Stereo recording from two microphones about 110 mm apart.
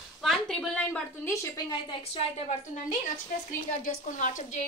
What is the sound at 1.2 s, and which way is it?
Speech, 25° left (ahead or behind).